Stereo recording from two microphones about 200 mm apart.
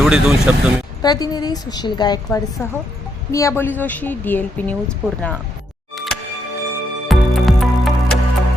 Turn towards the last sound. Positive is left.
turn(degrees=0)  # may be behind; listen again after turning